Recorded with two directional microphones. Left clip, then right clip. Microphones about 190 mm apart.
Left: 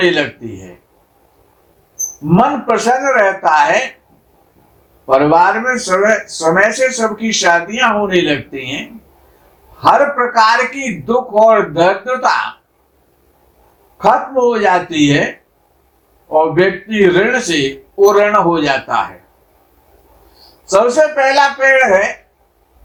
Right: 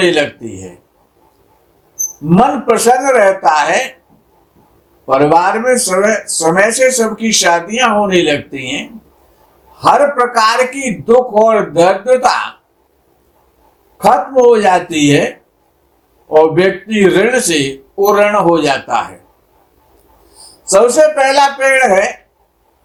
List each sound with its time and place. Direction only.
0.0 s speech: 45° right (ahead or behind)
2.3 s speech: 45° right (ahead or behind)
5.0 s speech: 45° right (ahead or behind)
14.0 s speech: 45° right (ahead or behind)
16.3 s speech: 45° right (ahead or behind)
20.7 s speech: 45° right (ahead or behind)